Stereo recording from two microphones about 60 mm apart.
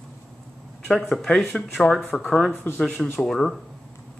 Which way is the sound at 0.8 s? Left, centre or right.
Centre.